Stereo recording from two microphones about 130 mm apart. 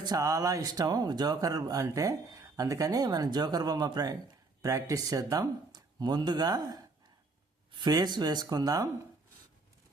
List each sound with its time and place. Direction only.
0.0 s speech: 30° right (ahead or behind)